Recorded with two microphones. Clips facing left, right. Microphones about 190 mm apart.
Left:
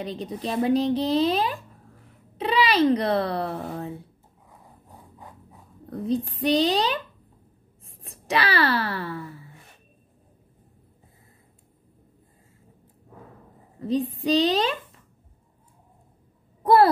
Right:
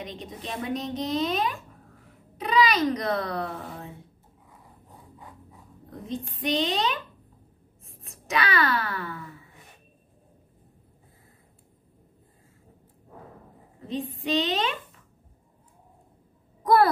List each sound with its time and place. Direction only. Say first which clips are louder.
0.0 s a woman's voice: left 7 dB; 35° left (ahead or behind)
6.0 s a woman's voice: left 6 dB; 35° left (ahead or behind)
13.7 s a woman's voice: left 7 dB; 40° left (ahead or behind)
16.6 s a sound: left 3 dB; 30° left (ahead or behind)